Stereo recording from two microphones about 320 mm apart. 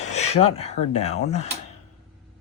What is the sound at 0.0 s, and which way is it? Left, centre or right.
Speech, left.